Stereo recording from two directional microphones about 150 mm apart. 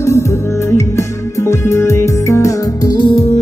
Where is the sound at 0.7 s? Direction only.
20° left (ahead or behind).